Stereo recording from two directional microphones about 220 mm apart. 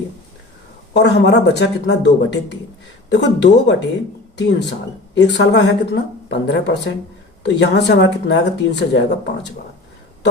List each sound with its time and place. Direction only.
0.9 s speech: 50° left (ahead or behind)